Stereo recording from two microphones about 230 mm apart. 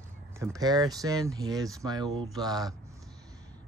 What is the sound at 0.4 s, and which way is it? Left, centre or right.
Speech, centre.